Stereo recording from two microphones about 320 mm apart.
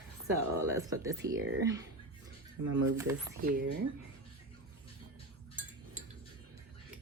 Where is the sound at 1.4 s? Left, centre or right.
Right.